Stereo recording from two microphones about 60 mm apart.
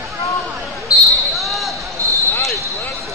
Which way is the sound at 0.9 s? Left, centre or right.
Left.